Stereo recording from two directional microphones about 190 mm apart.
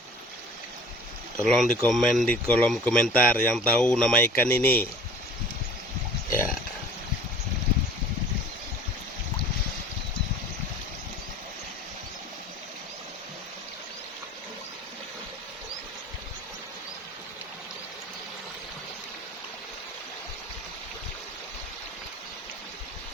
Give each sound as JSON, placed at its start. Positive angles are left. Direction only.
{"t": 1.4, "sound": "speech", "side_deg": 5}